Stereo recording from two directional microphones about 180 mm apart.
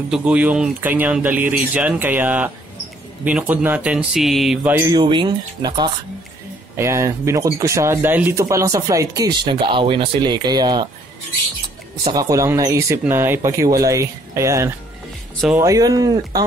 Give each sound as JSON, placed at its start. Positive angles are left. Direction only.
{"t": 0.1, "sound": "speech", "side_deg": -5}
{"t": 4.9, "sound": "speech", "side_deg": -25}
{"t": 12.1, "sound": "speech", "side_deg": -20}